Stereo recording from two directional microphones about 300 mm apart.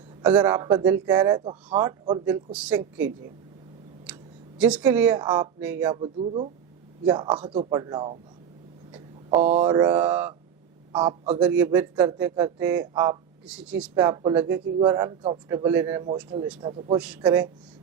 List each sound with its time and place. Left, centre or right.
0.2 s speech: centre
8.9 s a sound: centre
9.6 s speech: centre
11.4 s speech: centre